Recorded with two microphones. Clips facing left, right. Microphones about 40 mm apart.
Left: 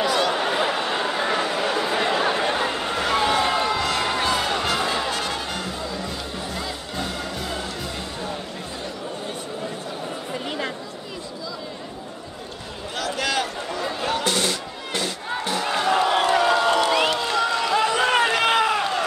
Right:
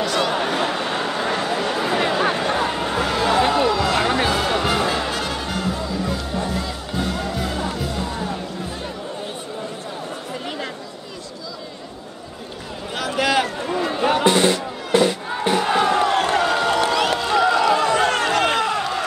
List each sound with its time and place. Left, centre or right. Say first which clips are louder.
0.2 s a sound: right 1 dB; centre
3.9 s music: right 3 dB; centre
12.9 s music: right 5 dB; centre
15.4 s crowd: right 6 dB; centre
15.9 s crowd: right 1 dB; centre
16.3 s a sound: even; centre
18.1 s run: even; centre